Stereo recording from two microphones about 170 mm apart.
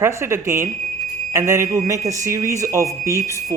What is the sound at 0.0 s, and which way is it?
Speech, 15° right (ahead or behind).